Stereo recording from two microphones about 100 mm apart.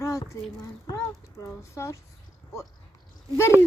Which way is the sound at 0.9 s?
35° left (ahead or behind).